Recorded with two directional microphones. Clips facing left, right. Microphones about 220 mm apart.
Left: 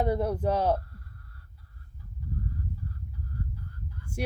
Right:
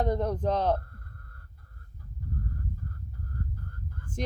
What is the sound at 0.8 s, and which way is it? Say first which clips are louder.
Chicken: even; 50° right (ahead or behind).